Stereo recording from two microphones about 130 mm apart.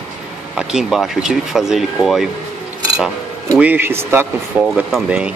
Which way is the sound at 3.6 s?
15° right (ahead or behind).